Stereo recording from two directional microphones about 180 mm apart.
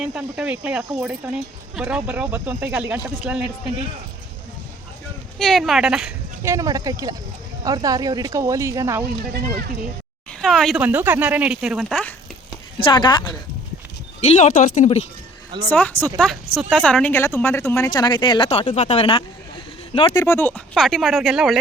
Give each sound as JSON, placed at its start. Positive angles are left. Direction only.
{"t": 0.0, "sound": "speech", "side_deg": -5}
{"t": 5.4, "sound": "speech", "side_deg": 0}
{"t": 6.5, "sound": "speech", "side_deg": -20}
{"t": 10.4, "sound": "speech", "side_deg": 0}
{"t": 12.8, "sound": "speech", "side_deg": 25}
{"t": 14.3, "sound": "speech", "side_deg": 40}
{"t": 15.7, "sound": "speech", "side_deg": 10}
{"t": 20.2, "sound": "speech", "side_deg": 10}